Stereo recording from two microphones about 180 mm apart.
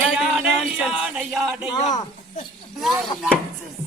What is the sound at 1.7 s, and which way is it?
Speech, 20° left (ahead or behind).